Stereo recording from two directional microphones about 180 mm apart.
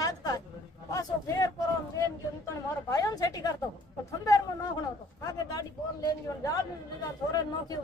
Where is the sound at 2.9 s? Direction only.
20° left (ahead or behind).